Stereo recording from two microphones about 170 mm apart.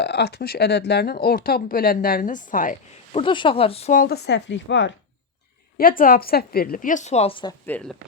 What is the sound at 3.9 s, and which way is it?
Speech, 65° left (ahead or behind).